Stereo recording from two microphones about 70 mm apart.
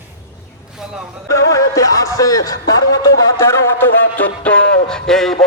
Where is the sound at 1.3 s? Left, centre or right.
Left.